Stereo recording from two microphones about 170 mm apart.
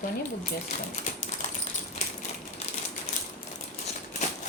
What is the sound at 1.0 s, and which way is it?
Typing, 50° left (ahead or behind).